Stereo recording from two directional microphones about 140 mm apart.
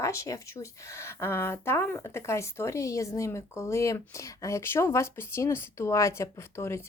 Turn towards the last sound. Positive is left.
turn(degrees=20)  # may be behind; listen again after turning